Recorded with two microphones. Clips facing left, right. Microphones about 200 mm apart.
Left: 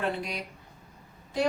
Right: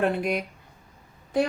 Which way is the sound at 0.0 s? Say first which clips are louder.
Right 7 dB; 55° right (ahead or behind).